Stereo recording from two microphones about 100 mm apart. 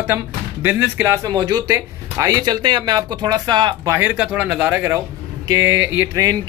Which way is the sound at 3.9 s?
20° right (ahead or behind).